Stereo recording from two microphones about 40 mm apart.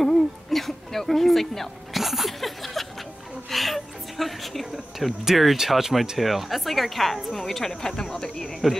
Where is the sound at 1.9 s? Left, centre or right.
Centre.